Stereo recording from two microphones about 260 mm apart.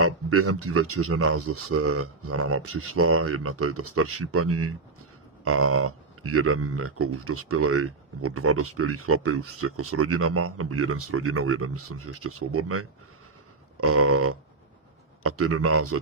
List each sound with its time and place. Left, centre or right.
0.0 s speech: right